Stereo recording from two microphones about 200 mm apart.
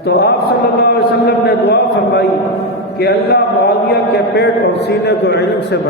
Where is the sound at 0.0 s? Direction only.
55° left (ahead or behind).